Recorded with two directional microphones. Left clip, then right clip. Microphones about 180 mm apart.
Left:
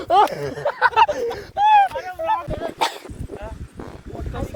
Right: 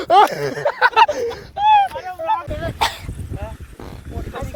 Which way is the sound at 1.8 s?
25° left (ahead or behind).